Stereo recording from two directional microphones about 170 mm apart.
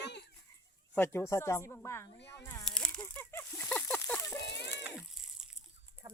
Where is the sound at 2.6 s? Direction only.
5° left (ahead or behind).